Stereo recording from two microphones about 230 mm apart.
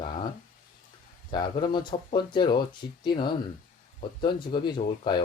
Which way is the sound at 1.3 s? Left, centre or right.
Centre.